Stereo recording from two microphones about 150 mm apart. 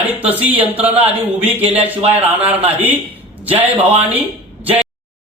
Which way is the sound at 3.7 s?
40° right (ahead or behind).